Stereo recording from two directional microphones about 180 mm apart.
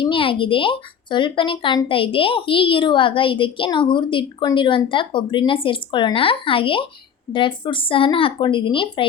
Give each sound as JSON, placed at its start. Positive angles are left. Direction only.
{"t": 0.0, "sound": "speech", "side_deg": 30}